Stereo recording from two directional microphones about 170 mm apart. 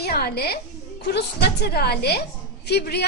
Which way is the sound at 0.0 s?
65° left (ahead or behind).